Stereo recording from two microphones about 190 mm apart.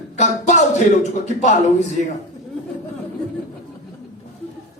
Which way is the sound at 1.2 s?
40° left (ahead or behind).